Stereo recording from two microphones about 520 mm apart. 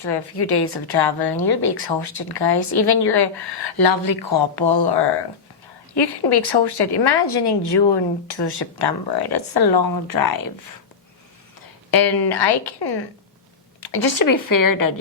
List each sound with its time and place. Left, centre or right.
0.0 s speech: left
11.6 s a woman's voice: left